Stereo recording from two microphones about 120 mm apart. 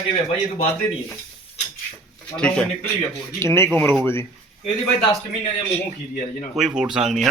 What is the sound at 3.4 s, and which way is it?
Speech, 20° left (ahead or behind).